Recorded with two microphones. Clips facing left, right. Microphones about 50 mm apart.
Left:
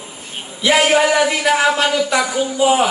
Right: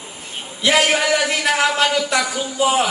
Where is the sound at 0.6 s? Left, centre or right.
Centre.